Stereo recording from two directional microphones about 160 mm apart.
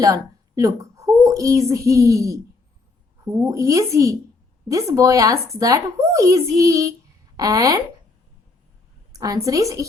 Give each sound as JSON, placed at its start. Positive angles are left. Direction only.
{"t": 0.0, "sound": "speech", "side_deg": -20}
{"t": 9.1, "sound": "speech", "side_deg": -20}